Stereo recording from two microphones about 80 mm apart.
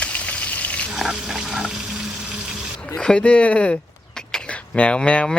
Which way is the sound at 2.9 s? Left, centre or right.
Centre.